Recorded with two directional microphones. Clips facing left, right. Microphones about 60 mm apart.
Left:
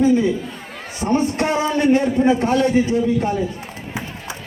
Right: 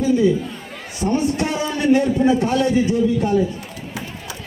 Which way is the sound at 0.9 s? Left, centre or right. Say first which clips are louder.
Left 1 dB; left.